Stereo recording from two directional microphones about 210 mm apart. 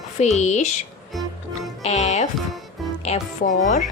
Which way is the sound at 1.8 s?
30° left (ahead or behind).